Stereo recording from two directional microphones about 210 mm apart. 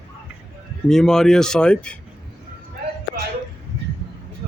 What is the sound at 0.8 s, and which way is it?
Speech, centre (ahead or behind).